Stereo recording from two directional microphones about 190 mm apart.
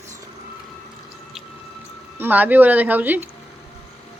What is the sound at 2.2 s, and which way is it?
Speech, 10° right (ahead or behind).